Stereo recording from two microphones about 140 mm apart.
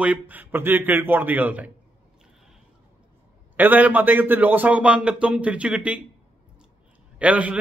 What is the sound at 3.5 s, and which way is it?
Speech, 15° right (ahead or behind).